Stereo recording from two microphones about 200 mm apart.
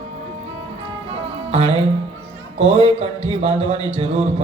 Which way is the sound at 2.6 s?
25° right (ahead or behind).